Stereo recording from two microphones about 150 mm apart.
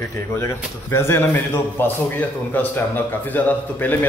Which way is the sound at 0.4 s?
15° left (ahead or behind).